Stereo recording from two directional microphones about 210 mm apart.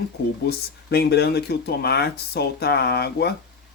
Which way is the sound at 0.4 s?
50° left (ahead or behind).